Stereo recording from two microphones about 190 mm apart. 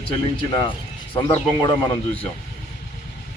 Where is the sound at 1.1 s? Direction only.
20° left (ahead or behind).